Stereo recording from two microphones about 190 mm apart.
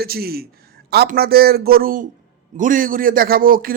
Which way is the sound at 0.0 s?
55° right (ahead or behind).